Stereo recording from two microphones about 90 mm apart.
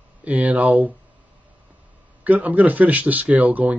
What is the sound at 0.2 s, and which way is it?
Speech, 15° right (ahead or behind).